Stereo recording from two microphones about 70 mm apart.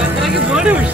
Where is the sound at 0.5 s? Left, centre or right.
Centre.